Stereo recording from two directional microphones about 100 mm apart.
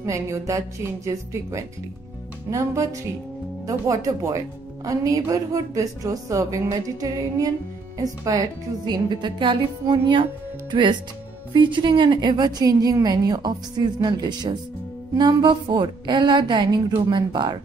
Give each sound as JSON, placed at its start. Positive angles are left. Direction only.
{"t": 0.0, "sound": "speech", "side_deg": -30}
{"t": 4.0, "sound": "speech", "side_deg": -30}
{"t": 8.8, "sound": "a woman's voice", "side_deg": -50}